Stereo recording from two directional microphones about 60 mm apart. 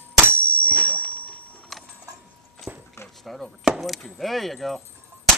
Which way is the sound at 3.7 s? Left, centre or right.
Centre.